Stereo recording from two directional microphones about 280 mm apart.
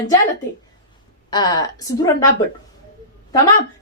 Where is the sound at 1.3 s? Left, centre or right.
Centre.